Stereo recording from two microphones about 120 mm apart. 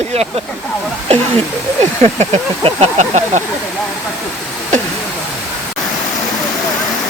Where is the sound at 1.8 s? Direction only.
65° right (ahead or behind).